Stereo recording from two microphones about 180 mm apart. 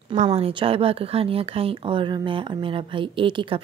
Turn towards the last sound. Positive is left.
turn(degrees=-30)  # may be behind; listen again after turning